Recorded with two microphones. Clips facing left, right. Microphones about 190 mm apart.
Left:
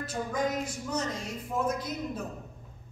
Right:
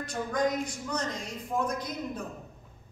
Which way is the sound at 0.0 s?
5° left (ahead or behind).